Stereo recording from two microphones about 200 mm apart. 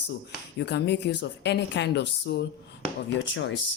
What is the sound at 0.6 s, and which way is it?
Speech, 60° left (ahead or behind).